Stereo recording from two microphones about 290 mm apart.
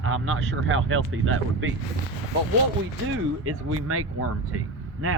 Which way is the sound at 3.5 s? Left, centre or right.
Right.